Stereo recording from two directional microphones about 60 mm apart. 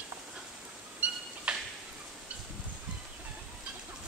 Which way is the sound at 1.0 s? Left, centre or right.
Right.